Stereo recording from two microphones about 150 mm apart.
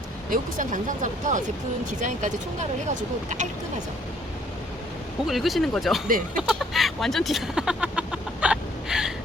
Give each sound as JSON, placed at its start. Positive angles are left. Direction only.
{"t": 0.3, "sound": "speech", "side_deg": -60}
{"t": 5.2, "sound": "speech", "side_deg": 0}
{"t": 6.4, "sound": "chicken", "side_deg": 0}